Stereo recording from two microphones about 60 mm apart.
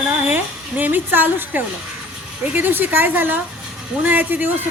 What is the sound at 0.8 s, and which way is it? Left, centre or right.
A woman's voice, right.